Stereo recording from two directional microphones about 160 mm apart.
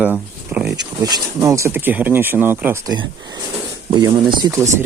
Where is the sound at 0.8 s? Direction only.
25° right (ahead or behind).